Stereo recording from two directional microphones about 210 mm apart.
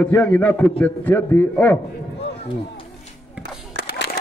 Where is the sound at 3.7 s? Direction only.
55° left (ahead or behind).